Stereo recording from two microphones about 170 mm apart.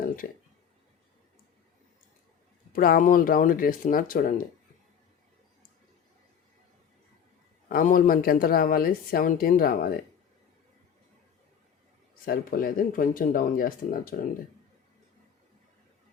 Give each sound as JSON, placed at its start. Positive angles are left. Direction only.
{"t": 0.2, "sound": "a woman's voice", "side_deg": 55}
{"t": 2.7, "sound": "a woman's voice", "side_deg": 55}
{"t": 7.7, "sound": "a woman's voice", "side_deg": 55}
{"t": 12.2, "sound": "a woman's voice", "side_deg": 55}